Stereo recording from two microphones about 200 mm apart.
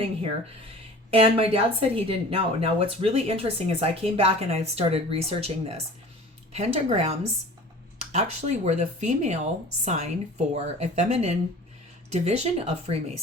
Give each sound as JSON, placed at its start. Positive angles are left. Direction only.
{"t": 1.1, "sound": "speech", "side_deg": -30}